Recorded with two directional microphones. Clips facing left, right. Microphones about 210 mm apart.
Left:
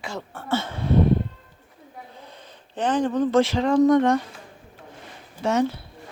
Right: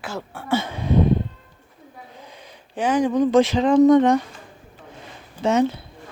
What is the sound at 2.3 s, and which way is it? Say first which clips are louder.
Speech: right 2 dB; 10° right (ahead or behind).